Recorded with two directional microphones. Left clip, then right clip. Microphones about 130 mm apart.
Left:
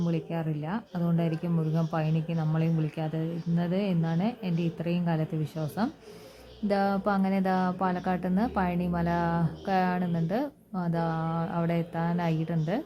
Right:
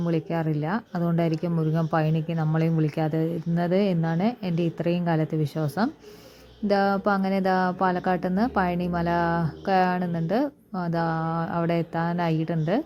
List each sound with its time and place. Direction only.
0.0 s a woman's voice: 30° right (ahead or behind)